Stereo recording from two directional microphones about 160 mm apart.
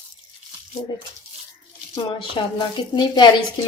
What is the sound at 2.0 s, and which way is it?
A woman's voice, 30° left (ahead or behind).